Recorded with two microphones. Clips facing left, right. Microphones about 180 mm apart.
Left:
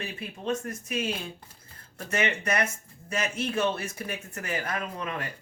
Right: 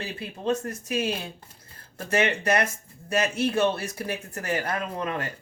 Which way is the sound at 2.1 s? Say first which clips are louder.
Right 4 dB; 35° right (ahead or behind).